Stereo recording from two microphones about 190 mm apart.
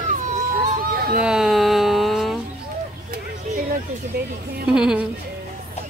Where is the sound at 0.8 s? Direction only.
50° right (ahead or behind).